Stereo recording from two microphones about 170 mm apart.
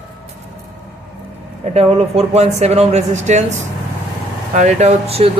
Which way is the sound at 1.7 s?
35° right (ahead or behind).